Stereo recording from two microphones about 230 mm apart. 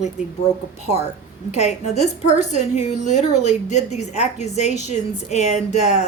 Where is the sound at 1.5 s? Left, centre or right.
Left.